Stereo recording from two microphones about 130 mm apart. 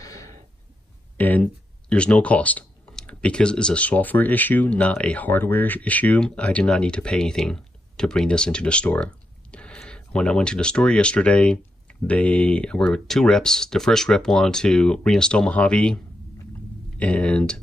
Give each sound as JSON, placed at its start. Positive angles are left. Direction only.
{"t": 0.0, "sound": "a sound", "side_deg": 25}
{"t": 1.1, "sound": "speech", "side_deg": 10}
{"t": 17.0, "sound": "speech", "side_deg": 10}